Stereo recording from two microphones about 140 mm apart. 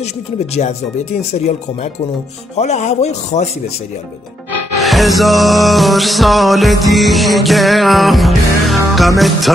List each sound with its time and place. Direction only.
2.5 s a man's voice: 55° left (ahead or behind)
4.8 s music: centre (ahead or behind)